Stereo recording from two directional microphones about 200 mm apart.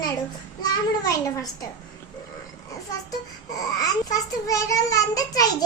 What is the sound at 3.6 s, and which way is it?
A child's voice, 15° left (ahead or behind).